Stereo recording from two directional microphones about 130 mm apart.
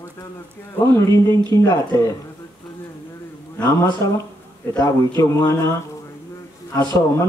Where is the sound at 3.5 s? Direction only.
20° left (ahead or behind).